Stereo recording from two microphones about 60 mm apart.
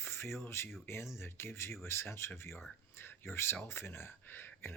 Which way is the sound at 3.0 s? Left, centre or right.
Left.